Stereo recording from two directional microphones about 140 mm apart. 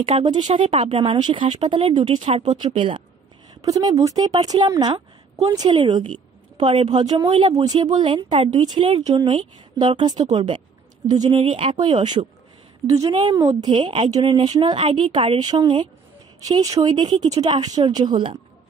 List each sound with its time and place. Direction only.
0.2 s speech: 30° right (ahead or behind)
2.0 s a woman's voice: 55° right (ahead or behind)
2.6 s speech: 35° right (ahead or behind)
3.6 s speech: 25° right (ahead or behind)
8.7 s speech: 50° right (ahead or behind); by 12.1 s 35° right (ahead or behind)
13.1 s speech: 35° right (ahead or behind)